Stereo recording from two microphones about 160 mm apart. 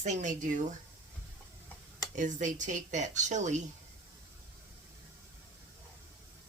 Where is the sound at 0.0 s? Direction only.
50° right (ahead or behind).